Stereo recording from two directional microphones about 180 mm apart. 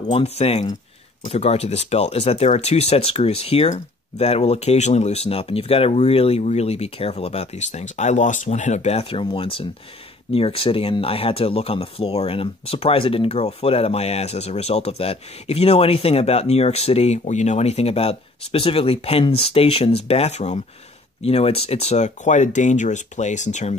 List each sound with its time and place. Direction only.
0.1 s speech: 35° left (ahead or behind)